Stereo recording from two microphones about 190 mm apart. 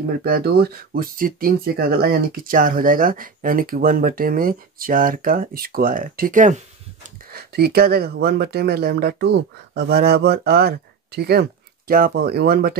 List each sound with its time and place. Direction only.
0.2 s speech: 55° right (ahead or behind)